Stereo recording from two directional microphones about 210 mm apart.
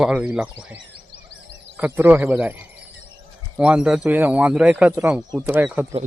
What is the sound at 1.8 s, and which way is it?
A man's voice, 5° right (ahead or behind).